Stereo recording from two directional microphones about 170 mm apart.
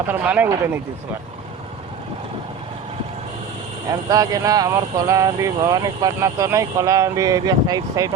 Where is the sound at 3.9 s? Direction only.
20° right (ahead or behind).